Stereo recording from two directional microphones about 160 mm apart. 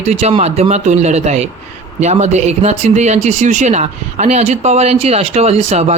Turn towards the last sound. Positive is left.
turn(degrees=-40)  # may be behind; listen again after turning